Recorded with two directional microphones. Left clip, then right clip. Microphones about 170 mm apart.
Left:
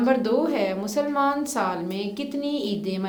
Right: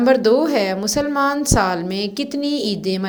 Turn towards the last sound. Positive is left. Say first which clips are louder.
# right 6 dB
turn(degrees=-30)  # may be behind; listen again after turning